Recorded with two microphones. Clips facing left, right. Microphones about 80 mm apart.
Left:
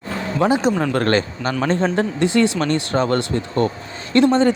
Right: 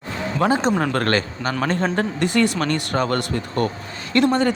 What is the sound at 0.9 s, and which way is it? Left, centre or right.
Speech, left.